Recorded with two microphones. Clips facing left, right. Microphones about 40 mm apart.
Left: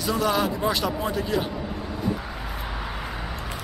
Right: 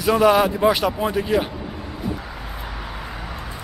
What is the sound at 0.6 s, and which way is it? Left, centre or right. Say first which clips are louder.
Speech: right 6 dB; centre.